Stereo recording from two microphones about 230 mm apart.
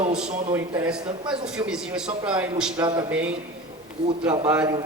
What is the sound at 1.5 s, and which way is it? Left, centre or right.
A man's voice, centre.